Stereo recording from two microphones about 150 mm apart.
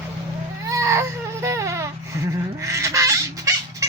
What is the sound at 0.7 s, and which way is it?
Baby cry, 20° right (ahead or behind).